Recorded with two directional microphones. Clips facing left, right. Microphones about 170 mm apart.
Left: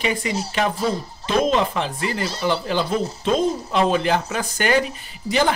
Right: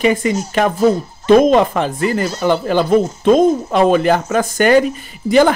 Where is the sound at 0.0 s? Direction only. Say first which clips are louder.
Right 8 dB; 50° right (ahead or behind).